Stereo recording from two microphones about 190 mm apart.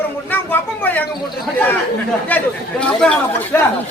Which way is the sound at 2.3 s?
10° left (ahead or behind).